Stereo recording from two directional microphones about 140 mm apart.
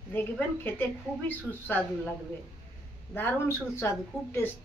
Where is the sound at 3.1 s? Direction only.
15° left (ahead or behind).